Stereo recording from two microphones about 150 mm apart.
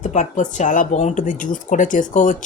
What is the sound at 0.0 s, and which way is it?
Speech, 55° left (ahead or behind).